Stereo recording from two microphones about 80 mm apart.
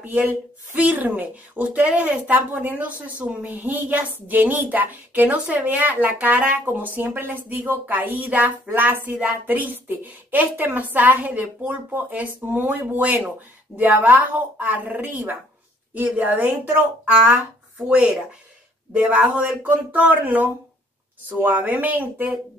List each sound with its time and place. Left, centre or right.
0.0 s speech: right
17.8 s speech: centre